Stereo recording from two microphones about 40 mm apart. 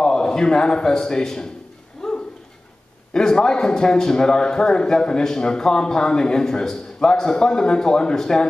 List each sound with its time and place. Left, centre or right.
0.0 s a man's voice: centre
2.0 s a sound: centre
3.1 s a man's voice: centre